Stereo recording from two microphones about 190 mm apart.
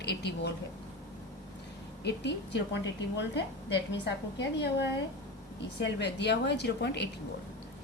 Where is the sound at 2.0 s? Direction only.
65° left (ahead or behind).